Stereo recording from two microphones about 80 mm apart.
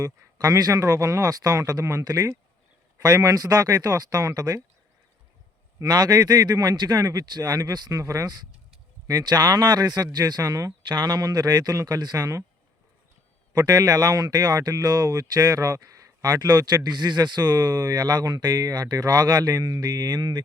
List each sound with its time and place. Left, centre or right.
0.3 s speech: right
2.0 s speech: right
5.8 s speech: right
9.0 s speech: right
10.8 s speech: right
13.5 s speech: right